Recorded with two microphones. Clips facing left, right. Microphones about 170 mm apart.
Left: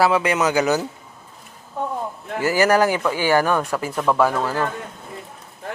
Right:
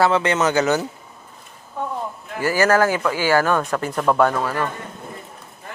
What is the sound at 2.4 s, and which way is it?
Speech, 15° left (ahead or behind).